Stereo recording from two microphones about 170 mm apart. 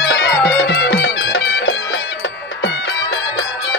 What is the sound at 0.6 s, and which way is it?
Music, 65° left (ahead or behind).